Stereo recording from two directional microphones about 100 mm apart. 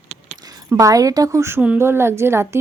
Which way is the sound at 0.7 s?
35° right (ahead or behind).